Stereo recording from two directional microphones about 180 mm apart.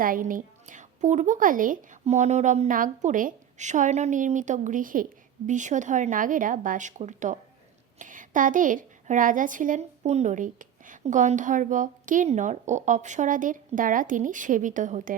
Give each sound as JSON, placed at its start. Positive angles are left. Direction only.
{"t": 0.0, "sound": "a woman's voice", "side_deg": -50}